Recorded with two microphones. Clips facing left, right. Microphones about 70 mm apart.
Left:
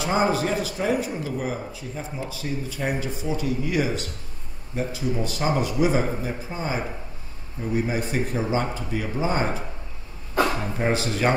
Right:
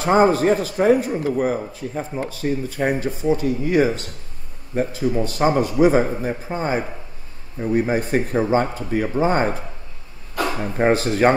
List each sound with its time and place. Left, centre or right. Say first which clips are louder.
0.0 s a man's voice: right 7 dB; right
10.8 s speech: right 8 dB; right